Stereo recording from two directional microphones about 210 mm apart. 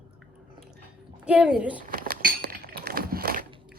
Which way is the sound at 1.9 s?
45° right (ahead or behind).